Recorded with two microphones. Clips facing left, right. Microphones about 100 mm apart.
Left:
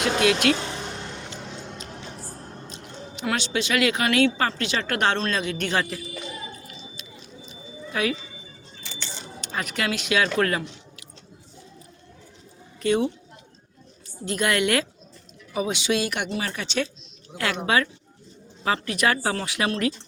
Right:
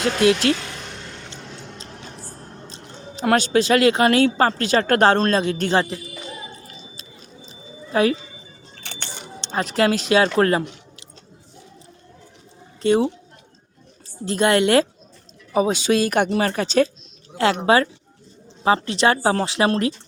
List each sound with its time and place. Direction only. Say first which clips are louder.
0.2 s speech: right 4 dB; 30° right (ahead or behind)
0.5 s vehicle: even; 25° left (ahead or behind)
2.6 s music: right 1 dB; 35° right (ahead or behind)
3.2 s speech: right 9 dB; 45° right (ahead or behind); by 6.0 s 30° right (ahead or behind)
6.7 s a sound: even; 35° right (ahead or behind)
8.7 s a sound: right 2 dB; 60° right (ahead or behind)
9.4 s speech: right 8 dB; 30° right (ahead or behind)
12.8 s a woman's voice: right 4 dB; 30° right (ahead or behind)
14.3 s speech: right 6 dB; 30° right (ahead or behind)
17.3 s speech: right 7 dB; 30° right (ahead or behind)